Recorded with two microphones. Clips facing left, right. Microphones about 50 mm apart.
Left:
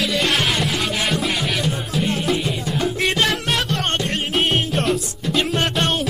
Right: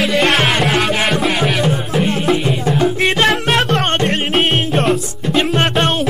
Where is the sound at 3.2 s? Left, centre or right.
Right.